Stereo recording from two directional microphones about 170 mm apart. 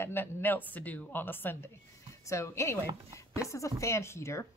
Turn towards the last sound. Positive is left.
turn(degrees=15)  # may be behind; listen again after turning